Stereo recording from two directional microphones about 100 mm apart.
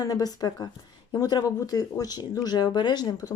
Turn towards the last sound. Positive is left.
turn(degrees=40)  # may be behind; listen again after turning